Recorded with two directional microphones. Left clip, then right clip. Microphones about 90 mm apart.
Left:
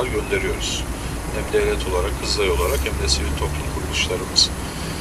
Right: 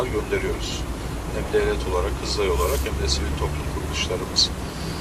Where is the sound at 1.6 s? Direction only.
30° left (ahead or behind).